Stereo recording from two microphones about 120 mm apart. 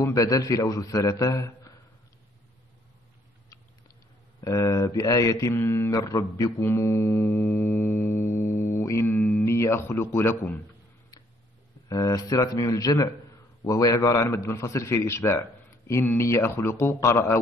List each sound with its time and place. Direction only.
0.0 s mantra: 30° left (ahead or behind)
4.4 s mantra: 25° left (ahead or behind)
11.9 s mantra: 30° left (ahead or behind)